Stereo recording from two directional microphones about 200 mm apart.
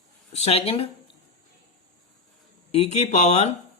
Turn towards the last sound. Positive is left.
turn(degrees=30)  # may be behind; listen again after turning